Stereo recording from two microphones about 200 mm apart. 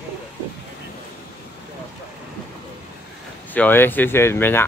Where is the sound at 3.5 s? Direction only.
10° left (ahead or behind).